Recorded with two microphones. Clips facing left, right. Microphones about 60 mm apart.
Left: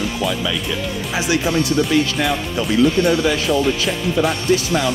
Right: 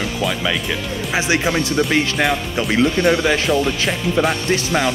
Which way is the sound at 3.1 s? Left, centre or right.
Right.